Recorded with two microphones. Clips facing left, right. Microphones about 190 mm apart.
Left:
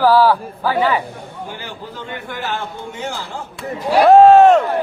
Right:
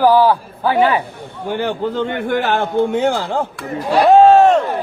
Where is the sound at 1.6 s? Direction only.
60° right (ahead or behind).